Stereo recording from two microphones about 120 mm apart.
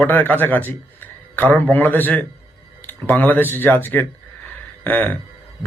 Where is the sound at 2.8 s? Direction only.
15° left (ahead or behind).